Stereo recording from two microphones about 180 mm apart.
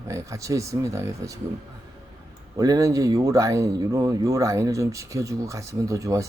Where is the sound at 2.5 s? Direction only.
20° right (ahead or behind).